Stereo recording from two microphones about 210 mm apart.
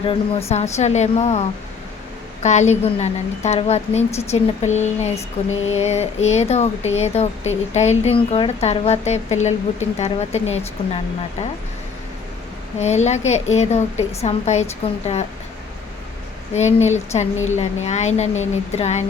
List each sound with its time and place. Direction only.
0.0 s speech: 25° left (ahead or behind)
2.4 s speech: 35° left (ahead or behind)
12.8 s speech: 30° left (ahead or behind)
16.6 s speech: 30° left (ahead or behind)